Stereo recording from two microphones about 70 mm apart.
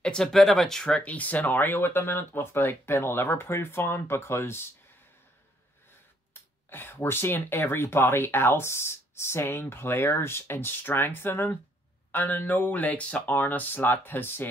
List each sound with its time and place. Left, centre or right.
0.0 s speech: centre; by 4.6 s left
6.3 s speech: left